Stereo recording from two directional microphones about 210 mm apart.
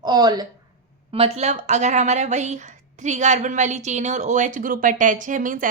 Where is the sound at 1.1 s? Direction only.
30° right (ahead or behind).